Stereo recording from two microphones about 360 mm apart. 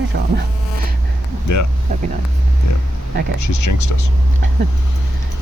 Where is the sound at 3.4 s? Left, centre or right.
Left.